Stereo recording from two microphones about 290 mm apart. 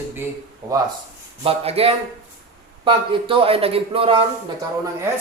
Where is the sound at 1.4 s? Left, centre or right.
Centre.